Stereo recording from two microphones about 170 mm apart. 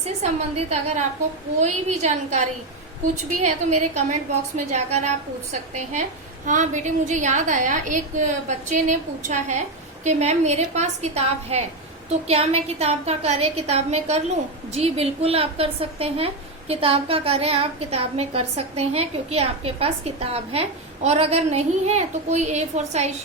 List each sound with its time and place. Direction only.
0.0 s a woman's voice: 40° right (ahead or behind)
5.7 s a woman's voice: 45° right (ahead or behind)